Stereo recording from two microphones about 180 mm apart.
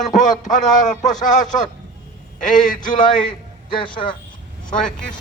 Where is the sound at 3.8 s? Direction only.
25° left (ahead or behind).